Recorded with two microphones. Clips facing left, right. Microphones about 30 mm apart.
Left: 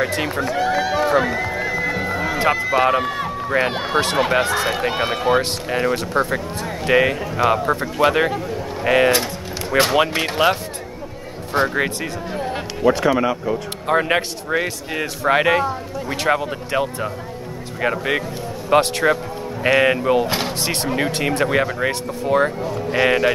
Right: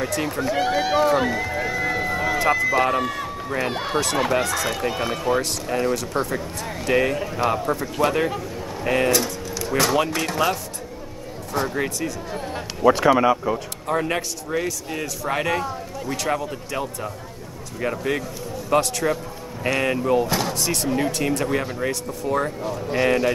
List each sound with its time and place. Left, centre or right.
0.0 s a man's voice: left
0.6 s run: centre
1.7 s music: centre
2.3 s a man's voice: left
12.8 s speech: centre
13.8 s a man's voice: left